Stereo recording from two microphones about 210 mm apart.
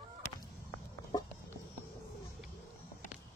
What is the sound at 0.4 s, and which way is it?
Walk, 15° left (ahead or behind).